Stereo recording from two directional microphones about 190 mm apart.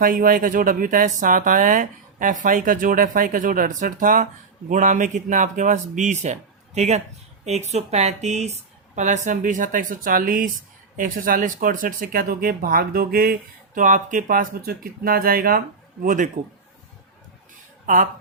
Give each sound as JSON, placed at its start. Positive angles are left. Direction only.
{"t": 0.0, "sound": "speech", "side_deg": -45}
{"t": 17.8, "sound": "speech", "side_deg": -45}